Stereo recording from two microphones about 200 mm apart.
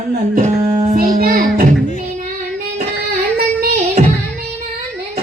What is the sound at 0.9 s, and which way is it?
Child singing, 45° right (ahead or behind).